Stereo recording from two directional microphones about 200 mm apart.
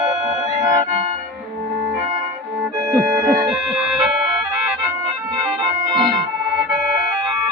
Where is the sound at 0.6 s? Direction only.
15° right (ahead or behind).